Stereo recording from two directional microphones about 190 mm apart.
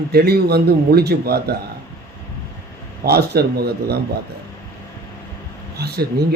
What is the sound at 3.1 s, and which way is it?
Speech, 55° right (ahead or behind).